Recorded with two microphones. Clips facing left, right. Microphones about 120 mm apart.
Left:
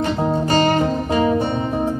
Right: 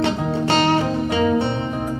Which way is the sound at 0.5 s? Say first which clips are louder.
Even; 75° right (ahead or behind).